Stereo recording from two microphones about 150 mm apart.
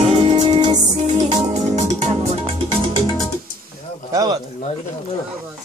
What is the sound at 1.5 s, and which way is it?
Music, 50° right (ahead or behind).